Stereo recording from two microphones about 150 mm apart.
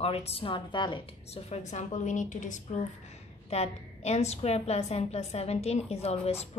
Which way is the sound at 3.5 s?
45° left (ahead or behind).